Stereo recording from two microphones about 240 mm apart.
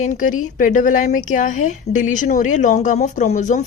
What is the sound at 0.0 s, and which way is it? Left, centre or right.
Speech, left.